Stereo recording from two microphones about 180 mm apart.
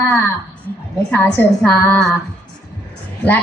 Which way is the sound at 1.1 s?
10° left (ahead or behind).